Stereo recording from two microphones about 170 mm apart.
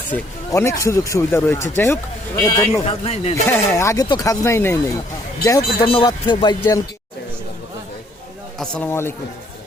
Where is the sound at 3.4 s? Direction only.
15° left (ahead or behind).